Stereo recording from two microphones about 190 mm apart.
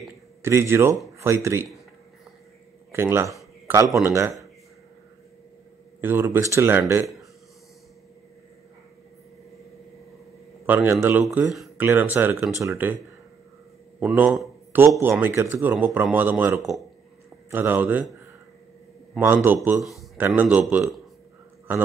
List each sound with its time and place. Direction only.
0.4 s speech: 15° right (ahead or behind)
2.9 s speech: 15° right (ahead or behind)
5.9 s speech: 10° right (ahead or behind)
10.7 s speech: 10° right (ahead or behind)
11.2 s speech: centre (ahead or behind)
13.9 s a man's voice: 10° right (ahead or behind)
19.1 s a man's voice: 10° right (ahead or behind)